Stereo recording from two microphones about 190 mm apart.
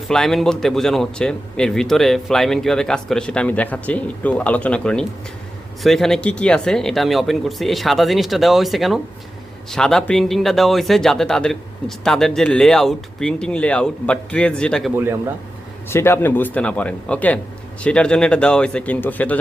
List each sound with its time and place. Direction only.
0.1 s a man's voice: centre (ahead or behind)